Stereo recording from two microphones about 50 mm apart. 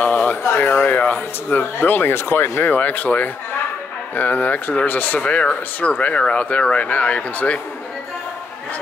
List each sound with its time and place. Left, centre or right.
0.0 s a sound: left
0.5 s speech: left
5.2 s speech: left